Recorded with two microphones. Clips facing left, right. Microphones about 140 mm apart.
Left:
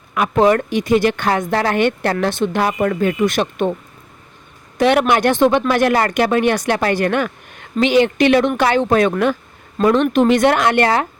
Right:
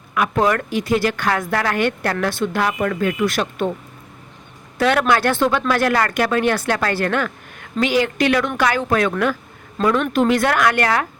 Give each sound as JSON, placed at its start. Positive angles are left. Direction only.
{"t": 0.1, "sound": "speech", "side_deg": 25}
{"t": 4.8, "sound": "speech", "side_deg": 20}